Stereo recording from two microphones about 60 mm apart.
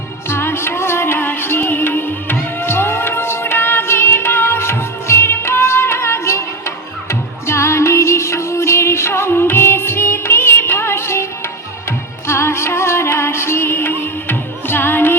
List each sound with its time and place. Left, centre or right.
0.3 s music: left